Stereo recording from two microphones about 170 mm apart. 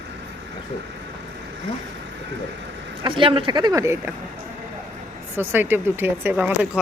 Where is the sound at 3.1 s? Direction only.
30° right (ahead or behind).